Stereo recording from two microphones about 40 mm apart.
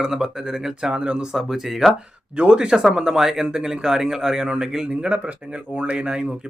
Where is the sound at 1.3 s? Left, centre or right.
Centre.